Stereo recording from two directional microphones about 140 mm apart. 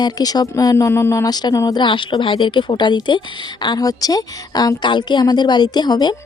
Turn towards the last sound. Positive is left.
turn(degrees=30)  # may be behind; listen again after turning